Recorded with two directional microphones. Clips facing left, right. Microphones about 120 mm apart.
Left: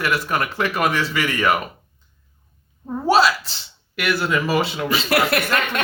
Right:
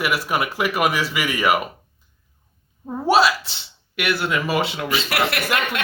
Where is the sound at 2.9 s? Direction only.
Centre (ahead or behind).